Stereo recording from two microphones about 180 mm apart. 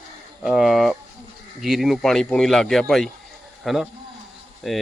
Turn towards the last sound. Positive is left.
turn(degrees=0)  # may be behind; listen again after turning